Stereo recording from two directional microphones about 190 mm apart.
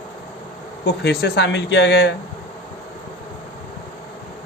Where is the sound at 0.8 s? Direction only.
55° left (ahead or behind).